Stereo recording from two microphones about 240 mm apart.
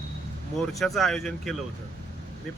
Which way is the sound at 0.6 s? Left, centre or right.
Centre.